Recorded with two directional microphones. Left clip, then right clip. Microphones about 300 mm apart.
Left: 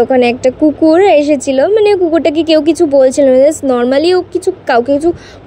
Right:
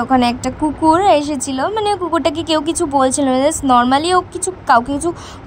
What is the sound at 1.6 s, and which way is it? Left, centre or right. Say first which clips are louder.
Speech: left 7 dB; right.